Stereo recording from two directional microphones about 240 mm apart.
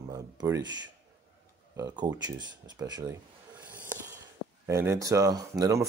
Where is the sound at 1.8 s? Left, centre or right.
Centre.